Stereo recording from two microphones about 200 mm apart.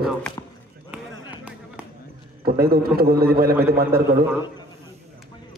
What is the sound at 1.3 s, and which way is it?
Music, 5° right (ahead or behind).